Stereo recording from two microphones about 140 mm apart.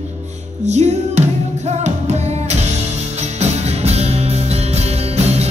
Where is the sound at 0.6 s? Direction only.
55° right (ahead or behind).